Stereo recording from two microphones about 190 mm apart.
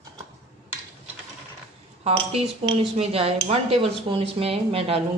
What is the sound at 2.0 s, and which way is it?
Speech, 30° right (ahead or behind).